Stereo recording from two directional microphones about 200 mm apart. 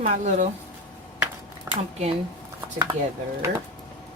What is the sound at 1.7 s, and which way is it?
Speech, 15° right (ahead or behind).